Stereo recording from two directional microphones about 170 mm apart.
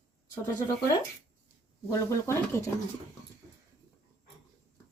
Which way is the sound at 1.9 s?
15° left (ahead or behind).